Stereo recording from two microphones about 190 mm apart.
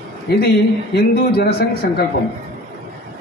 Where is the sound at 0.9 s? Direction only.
55° left (ahead or behind).